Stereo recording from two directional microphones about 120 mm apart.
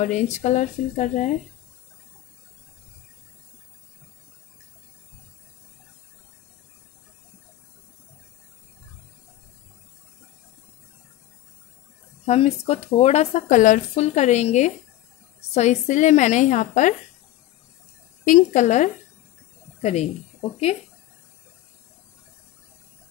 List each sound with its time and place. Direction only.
0.0 s speech: 75° left (ahead or behind)
12.3 s a woman's voice: 60° left (ahead or behind); by 16.9 s 90° left
18.2 s a woman's voice: 90° left
19.8 s speech: 65° left (ahead or behind)